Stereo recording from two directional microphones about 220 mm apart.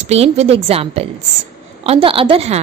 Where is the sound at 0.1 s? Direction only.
30° right (ahead or behind).